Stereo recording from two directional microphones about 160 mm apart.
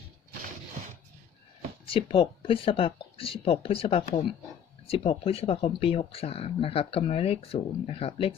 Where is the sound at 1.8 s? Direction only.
35° left (ahead or behind).